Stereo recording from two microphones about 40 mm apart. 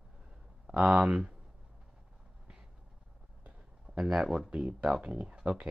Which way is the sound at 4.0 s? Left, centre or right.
Centre.